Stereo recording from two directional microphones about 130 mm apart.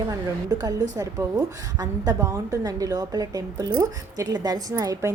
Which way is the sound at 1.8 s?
30° right (ahead or behind).